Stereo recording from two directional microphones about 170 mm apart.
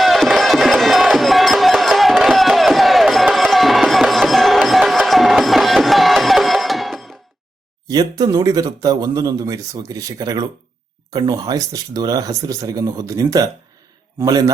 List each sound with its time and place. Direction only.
0.0 s music: centre (ahead or behind)
7.9 s speech: 20° right (ahead or behind)